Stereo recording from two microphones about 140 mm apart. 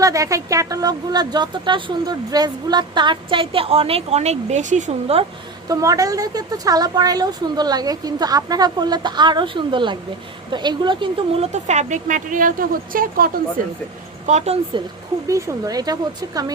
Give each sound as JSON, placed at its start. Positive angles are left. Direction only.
{"t": 0.0, "sound": "speech", "side_deg": -25}
{"t": 5.1, "sound": "a woman's voice", "side_deg": -45}
{"t": 5.6, "sound": "a woman's voice", "side_deg": -25}
{"t": 14.3, "sound": "a woman's voice", "side_deg": -50}
{"t": 15.3, "sound": "a woman's voice", "side_deg": -20}